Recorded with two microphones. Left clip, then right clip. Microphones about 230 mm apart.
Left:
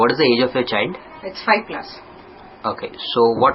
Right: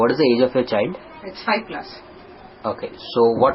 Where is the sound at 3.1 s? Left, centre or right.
Left.